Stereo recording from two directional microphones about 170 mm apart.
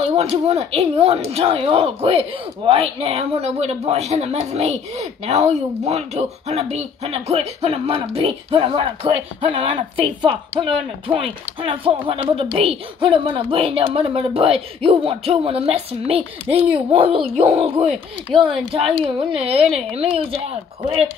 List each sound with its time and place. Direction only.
0.1 s speech: 40° right (ahead or behind)